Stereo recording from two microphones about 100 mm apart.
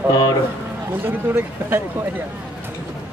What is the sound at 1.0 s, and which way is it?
Speech, 20° right (ahead or behind).